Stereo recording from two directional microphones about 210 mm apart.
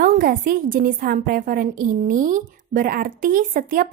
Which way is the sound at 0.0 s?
40° right (ahead or behind).